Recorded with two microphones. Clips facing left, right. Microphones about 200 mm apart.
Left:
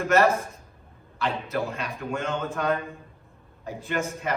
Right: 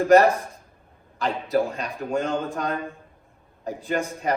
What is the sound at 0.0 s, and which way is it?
A man's voice, 35° right (ahead or behind).